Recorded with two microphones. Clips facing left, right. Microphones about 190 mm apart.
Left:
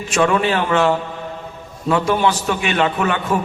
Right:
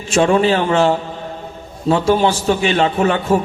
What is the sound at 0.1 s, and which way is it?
A man's voice, 30° right (ahead or behind).